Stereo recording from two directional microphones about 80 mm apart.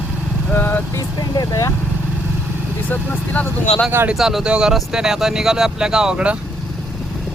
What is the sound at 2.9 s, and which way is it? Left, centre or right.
Speech, left.